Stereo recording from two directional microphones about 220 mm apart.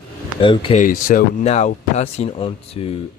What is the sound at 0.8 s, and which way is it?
Speech, 35° left (ahead or behind).